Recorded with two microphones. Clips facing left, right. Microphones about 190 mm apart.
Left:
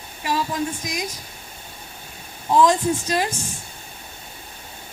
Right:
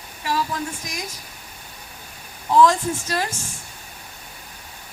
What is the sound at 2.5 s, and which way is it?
Speech, 15° left (ahead or behind).